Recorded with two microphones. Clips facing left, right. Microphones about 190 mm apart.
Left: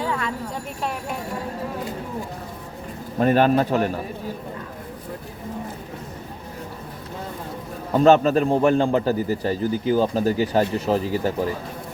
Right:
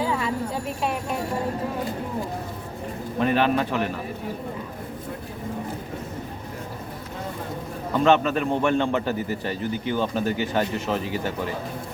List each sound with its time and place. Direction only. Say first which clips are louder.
0.0 s a sound: right 1 dB; 10° right (ahead or behind)
3.2 s a man's voice: left 4 dB; 45° left (ahead or behind)
7.9 s a man's voice: left 4 dB; 40° left (ahead or behind)